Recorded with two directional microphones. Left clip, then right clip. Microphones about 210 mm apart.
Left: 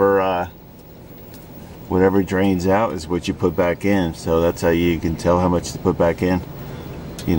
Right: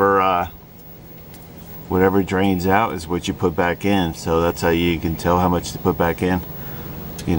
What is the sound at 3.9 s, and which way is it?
Speech, 5° right (ahead or behind).